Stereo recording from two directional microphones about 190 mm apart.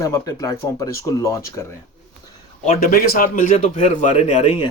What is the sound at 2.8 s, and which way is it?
A man's voice, 50° left (ahead or behind).